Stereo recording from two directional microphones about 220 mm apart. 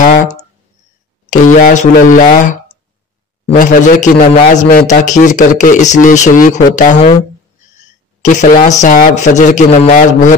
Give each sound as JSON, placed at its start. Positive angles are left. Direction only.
{"t": 0.0, "sound": "clicking", "side_deg": 35}
{"t": 1.6, "sound": "a man's voice", "side_deg": 35}
{"t": 3.4, "sound": "a man's voice", "side_deg": 35}